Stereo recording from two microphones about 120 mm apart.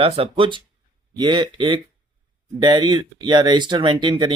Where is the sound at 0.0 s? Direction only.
50° right (ahead or behind).